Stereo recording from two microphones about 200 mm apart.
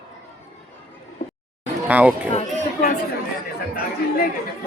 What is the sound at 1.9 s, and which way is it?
Speech, 10° right (ahead or behind).